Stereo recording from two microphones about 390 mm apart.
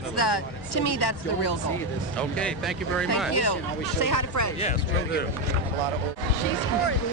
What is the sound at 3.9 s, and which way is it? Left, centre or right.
Speech, left.